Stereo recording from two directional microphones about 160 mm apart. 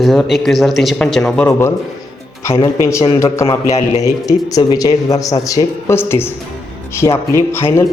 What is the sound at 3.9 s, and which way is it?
Speech, 20° left (ahead or behind).